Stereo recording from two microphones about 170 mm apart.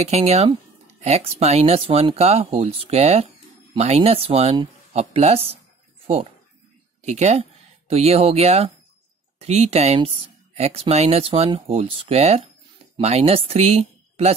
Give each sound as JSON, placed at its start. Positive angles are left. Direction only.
{"t": 0.0, "sound": "speech", "side_deg": -40}
{"t": 7.1, "sound": "speech", "side_deg": -40}